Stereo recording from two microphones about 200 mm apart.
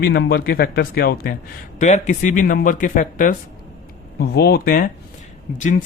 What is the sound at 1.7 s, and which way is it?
Speech, 35° left (ahead or behind).